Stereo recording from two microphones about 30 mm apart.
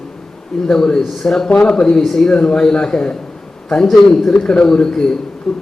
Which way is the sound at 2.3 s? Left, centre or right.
Left.